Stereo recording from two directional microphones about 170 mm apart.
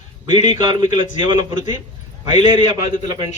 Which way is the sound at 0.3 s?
25° right (ahead or behind).